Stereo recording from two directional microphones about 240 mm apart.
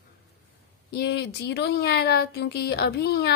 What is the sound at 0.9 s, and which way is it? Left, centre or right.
Speech, left.